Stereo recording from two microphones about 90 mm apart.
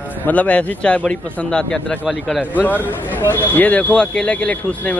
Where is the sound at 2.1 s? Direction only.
Centre (ahead or behind).